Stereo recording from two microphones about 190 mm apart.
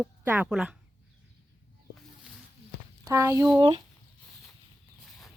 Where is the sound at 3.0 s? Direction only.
15° right (ahead or behind).